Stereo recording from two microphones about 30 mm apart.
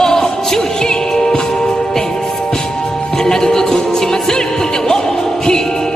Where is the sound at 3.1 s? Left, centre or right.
Left.